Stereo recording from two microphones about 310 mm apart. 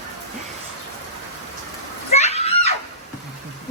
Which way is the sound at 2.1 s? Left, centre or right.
Left.